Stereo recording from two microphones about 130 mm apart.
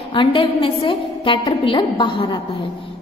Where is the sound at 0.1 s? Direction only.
40° left (ahead or behind).